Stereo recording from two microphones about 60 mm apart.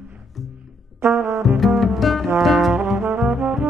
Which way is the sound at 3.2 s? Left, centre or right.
Centre.